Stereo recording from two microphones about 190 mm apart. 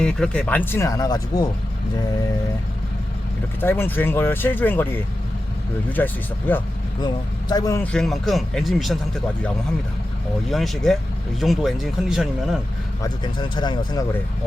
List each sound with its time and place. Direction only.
0.0 s speech: 5° left (ahead or behind)
3.6 s speech: 10° left (ahead or behind)
6.0 s speech: 10° left (ahead or behind)
7.0 s speech: 20° left (ahead or behind)
7.9 s speech: centre (ahead or behind)
10.5 s speech: centre (ahead or behind)
13.0 s speech: 25° left (ahead or behind)